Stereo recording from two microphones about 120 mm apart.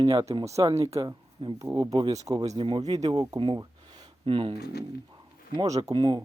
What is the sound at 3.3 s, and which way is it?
Speech, 45° right (ahead or behind).